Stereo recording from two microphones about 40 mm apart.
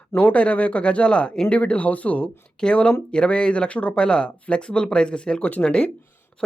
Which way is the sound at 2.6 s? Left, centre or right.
Left.